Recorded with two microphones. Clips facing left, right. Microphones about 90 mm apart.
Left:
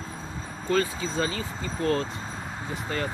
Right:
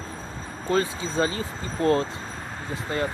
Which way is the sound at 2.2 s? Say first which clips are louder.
Even; 10° left (ahead or behind).